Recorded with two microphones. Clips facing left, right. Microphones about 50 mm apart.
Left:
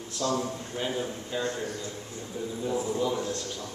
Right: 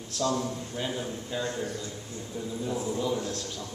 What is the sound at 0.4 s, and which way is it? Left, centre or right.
A man's voice, centre.